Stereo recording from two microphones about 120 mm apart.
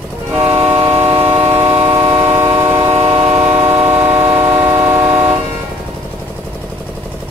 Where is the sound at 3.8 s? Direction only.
15° right (ahead or behind).